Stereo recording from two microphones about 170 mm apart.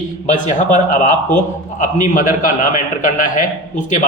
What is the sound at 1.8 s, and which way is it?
A man's voice, 50° left (ahead or behind).